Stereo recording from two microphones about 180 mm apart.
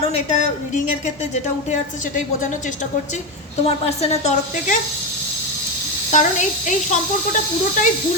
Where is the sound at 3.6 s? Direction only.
35° left (ahead or behind).